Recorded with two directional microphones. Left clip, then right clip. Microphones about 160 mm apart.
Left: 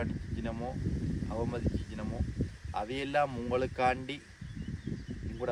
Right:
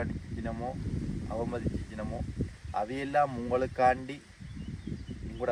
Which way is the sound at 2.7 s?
20° left (ahead or behind).